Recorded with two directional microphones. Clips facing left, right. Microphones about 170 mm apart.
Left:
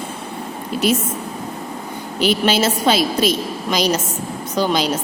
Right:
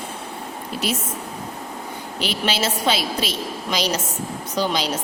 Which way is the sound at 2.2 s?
45° left (ahead or behind).